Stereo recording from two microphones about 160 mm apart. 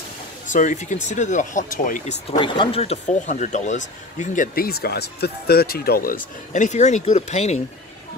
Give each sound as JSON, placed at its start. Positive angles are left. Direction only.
{"t": 0.5, "sound": "speech", "side_deg": 50}
{"t": 2.3, "sound": "speech", "side_deg": 30}